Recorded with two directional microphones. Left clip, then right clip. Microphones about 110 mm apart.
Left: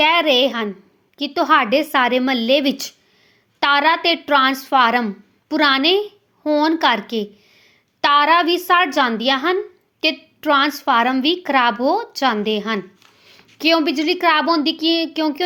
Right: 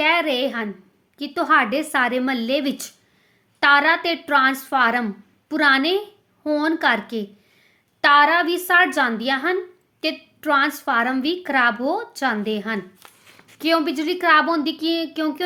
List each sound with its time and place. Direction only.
0.0 s a woman's voice: 25° left (ahead or behind)